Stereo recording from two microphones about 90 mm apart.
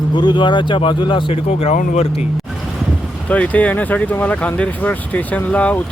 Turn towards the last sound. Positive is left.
turn(degrees=15)  # may be behind; listen again after turning